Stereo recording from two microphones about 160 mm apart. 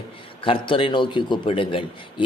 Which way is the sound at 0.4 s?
30° left (ahead or behind).